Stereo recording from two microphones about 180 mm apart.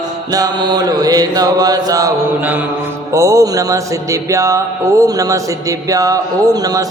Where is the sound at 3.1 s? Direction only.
15° right (ahead or behind).